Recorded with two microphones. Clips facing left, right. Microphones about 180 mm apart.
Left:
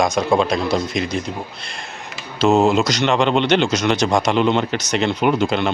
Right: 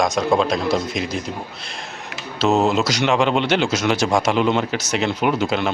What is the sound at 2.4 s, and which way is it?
Speech, centre (ahead or behind).